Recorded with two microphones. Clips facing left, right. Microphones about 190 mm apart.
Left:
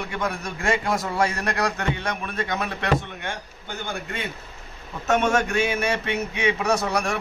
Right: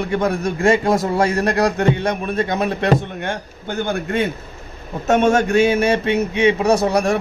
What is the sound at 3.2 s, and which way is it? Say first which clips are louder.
A man's voice: right 8 dB; 60° right (ahead or behind).